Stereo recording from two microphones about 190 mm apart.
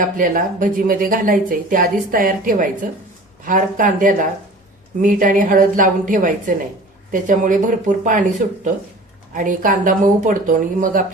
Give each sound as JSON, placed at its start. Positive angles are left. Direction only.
{"t": 0.2, "sound": "a woman's voice", "side_deg": -45}